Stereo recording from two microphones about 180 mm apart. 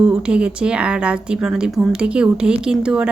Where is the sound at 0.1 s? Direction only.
5° right (ahead or behind).